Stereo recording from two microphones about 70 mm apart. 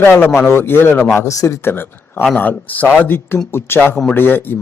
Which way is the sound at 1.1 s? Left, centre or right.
Left.